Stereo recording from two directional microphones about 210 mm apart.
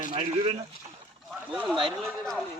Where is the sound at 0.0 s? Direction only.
30° right (ahead or behind).